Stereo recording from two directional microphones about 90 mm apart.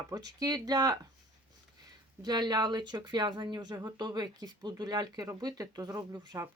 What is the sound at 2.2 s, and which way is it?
Speech, 50° right (ahead or behind).